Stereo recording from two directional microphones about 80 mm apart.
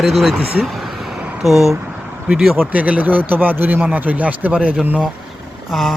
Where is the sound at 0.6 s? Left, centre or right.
Centre.